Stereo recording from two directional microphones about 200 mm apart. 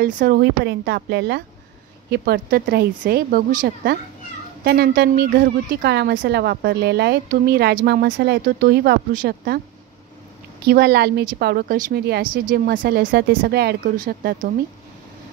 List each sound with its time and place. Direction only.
0.0 s speech: 50° right (ahead or behind)
10.6 s speech: 50° right (ahead or behind)